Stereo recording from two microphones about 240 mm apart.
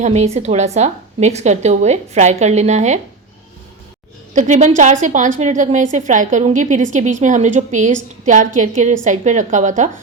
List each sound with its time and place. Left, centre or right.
0.0 s a woman's voice: right
4.4 s a woman's voice: right